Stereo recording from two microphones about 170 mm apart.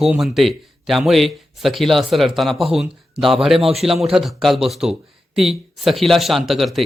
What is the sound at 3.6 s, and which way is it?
Speech, 35° right (ahead or behind).